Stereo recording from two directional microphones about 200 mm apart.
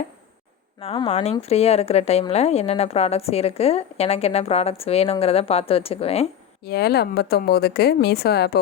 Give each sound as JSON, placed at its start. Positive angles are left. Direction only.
{"t": 0.8, "sound": "a woman's voice", "side_deg": 30}
{"t": 6.7, "sound": "a woman's voice", "side_deg": 55}